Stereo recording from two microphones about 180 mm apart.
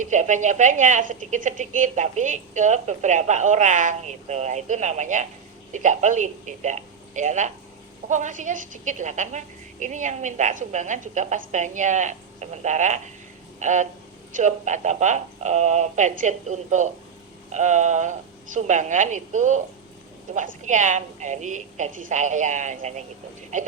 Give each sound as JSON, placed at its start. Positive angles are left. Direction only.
{"t": 0.0, "sound": "speech", "side_deg": -45}